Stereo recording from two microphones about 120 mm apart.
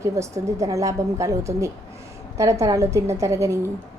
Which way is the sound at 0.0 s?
25° right (ahead or behind).